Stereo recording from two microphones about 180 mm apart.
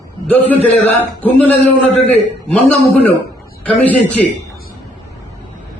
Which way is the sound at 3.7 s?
10° left (ahead or behind).